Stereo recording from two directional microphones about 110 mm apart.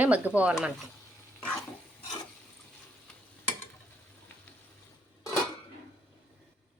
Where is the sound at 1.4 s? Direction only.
10° left (ahead or behind).